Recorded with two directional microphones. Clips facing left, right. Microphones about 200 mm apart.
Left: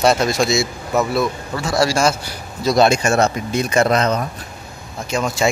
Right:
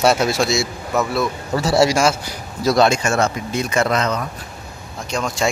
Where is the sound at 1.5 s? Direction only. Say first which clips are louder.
Right 5 dB; 35° right (ahead or behind).